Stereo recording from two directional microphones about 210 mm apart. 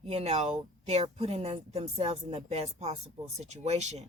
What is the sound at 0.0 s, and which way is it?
Speech, 30° right (ahead or behind).